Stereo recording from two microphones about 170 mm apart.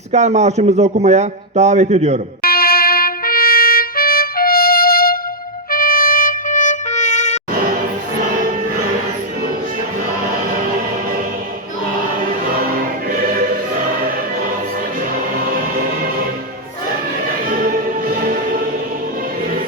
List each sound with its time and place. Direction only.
0.1 s a man's voice: 40° right (ahead or behind)
2.4 s music: 65° left (ahead or behind)
5.7 s trumpet: 60° left (ahead or behind)
15.4 s music: 55° right (ahead or behind)
18.2 s music: 55° right (ahead or behind)